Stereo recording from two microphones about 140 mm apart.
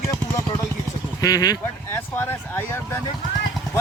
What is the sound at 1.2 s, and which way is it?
Speech, 25° left (ahead or behind).